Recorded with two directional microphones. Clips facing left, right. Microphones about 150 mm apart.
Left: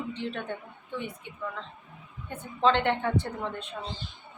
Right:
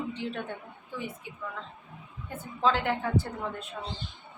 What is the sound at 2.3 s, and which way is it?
A woman's voice, 5° right (ahead or behind).